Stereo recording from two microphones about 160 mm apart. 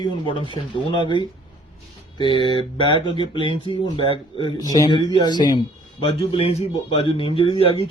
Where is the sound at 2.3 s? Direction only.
35° right (ahead or behind).